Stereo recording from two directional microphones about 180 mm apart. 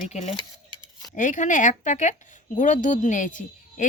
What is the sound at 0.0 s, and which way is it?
A woman's voice, 40° left (ahead or behind).